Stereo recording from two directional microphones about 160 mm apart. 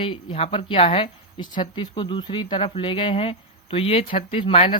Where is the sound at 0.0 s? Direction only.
30° left (ahead or behind).